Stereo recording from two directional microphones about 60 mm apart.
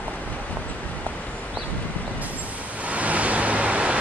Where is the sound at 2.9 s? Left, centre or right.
Right.